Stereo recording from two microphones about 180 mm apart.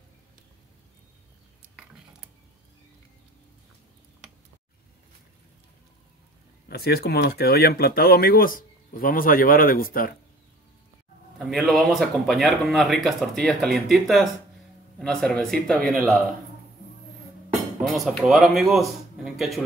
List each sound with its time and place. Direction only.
6.7 s speech: 60° left (ahead or behind)
11.3 s speech: centre (ahead or behind)
17.9 s speech: centre (ahead or behind)